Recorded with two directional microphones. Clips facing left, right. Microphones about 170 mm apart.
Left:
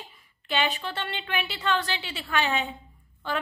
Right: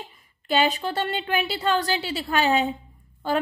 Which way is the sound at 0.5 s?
40° right (ahead or behind).